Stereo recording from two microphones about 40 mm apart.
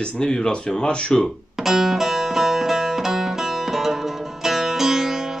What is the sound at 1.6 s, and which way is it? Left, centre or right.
Music, centre.